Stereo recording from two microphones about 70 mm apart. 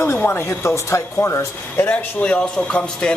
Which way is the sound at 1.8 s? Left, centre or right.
Left.